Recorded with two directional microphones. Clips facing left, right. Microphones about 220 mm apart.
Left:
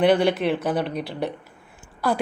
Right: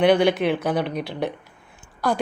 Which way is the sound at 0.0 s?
Centre (ahead or behind).